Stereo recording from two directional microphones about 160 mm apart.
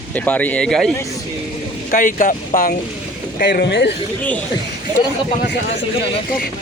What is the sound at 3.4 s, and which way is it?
Speech, 85° left.